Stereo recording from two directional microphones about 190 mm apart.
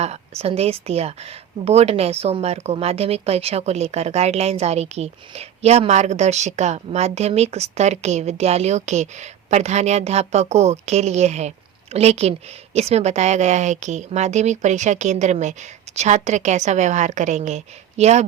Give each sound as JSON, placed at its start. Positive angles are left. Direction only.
{"t": 0.0, "sound": "speech", "side_deg": -35}